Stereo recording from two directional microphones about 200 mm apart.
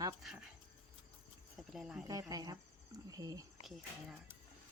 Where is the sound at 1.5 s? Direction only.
Centre (ahead or behind).